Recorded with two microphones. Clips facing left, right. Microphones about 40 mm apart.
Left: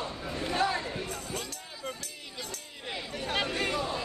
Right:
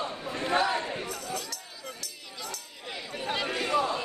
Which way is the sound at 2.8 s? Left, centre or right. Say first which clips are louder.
Left 3 dB; centre.